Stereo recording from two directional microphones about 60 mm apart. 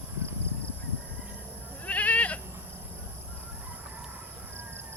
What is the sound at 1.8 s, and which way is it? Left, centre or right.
Goat, left.